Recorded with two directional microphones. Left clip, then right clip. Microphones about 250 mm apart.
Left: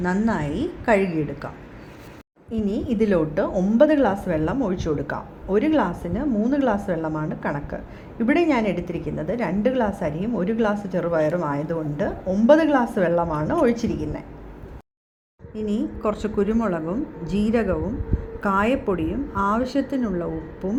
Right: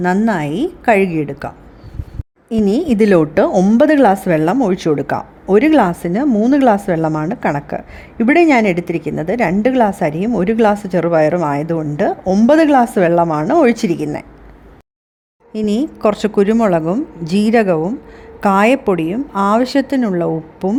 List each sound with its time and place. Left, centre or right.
0.3 s a woman's voice: right
2.5 s a woman's voice: right
15.5 s a woman's voice: right